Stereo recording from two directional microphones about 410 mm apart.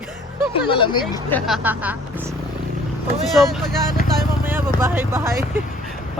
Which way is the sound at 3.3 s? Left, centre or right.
Centre.